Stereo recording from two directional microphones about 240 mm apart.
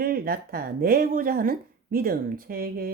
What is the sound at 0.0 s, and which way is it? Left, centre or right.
Speech, right.